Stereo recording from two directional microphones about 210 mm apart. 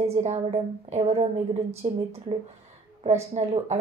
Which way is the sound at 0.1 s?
30° right (ahead or behind).